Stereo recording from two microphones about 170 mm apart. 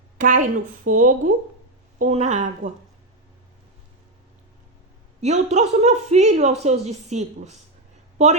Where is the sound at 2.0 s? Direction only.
40° right (ahead or behind).